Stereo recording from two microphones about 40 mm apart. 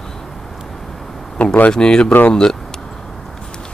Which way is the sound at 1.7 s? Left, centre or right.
Left.